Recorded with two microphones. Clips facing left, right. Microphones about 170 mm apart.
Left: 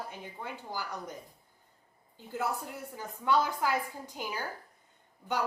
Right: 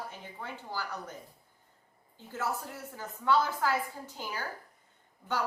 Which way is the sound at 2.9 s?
15° left (ahead or behind).